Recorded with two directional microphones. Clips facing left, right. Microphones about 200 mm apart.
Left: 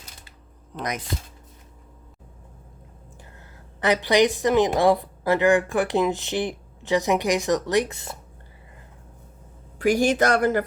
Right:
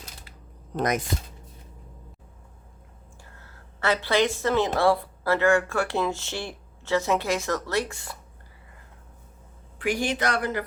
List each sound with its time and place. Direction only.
0.8 s speech: 50° right (ahead or behind)
3.4 s a woman's voice: 15° left (ahead or behind)
9.7 s speech: 40° left (ahead or behind)